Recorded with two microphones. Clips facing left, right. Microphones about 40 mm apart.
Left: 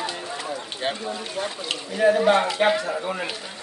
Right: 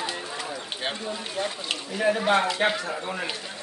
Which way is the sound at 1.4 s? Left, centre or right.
Centre.